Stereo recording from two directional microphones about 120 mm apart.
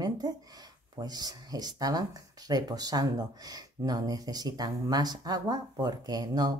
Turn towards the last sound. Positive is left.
turn(degrees=-35)  # may be behind; listen again after turning